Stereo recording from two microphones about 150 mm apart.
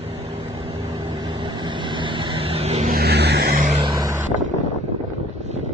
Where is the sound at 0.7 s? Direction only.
30° right (ahead or behind); by 2.9 s 45° right (ahead or behind).